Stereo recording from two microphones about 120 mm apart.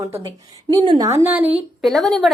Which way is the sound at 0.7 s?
35° right (ahead or behind).